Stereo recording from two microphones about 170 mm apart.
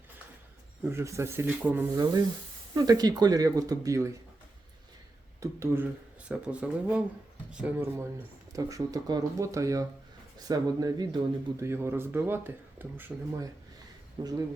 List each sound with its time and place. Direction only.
0.9 s speech: 15° right (ahead or behind)
2.7 s speech: 25° right (ahead or behind)
5.4 s speech: 15° right (ahead or behind)
14.2 s speech: 20° right (ahead or behind)